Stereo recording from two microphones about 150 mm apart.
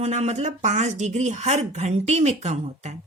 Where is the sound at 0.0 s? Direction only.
50° right (ahead or behind).